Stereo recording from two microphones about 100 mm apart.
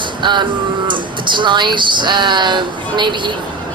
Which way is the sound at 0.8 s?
50° right (ahead or behind).